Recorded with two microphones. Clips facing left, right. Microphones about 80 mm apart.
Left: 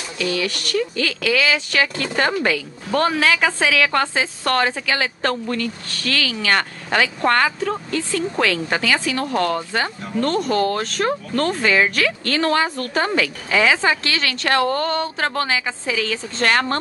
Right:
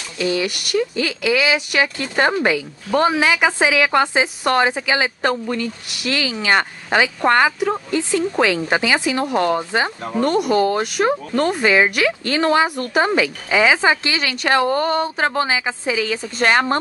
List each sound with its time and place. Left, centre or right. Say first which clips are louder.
0.2 s speech: right 2 dB; right